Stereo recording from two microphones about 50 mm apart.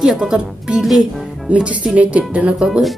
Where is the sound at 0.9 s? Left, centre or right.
Centre.